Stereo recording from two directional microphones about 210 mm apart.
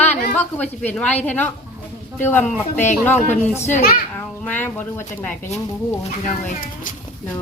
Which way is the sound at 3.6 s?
40° left (ahead or behind).